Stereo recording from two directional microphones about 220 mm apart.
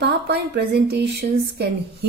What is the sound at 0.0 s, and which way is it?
Speech, 50° right (ahead or behind).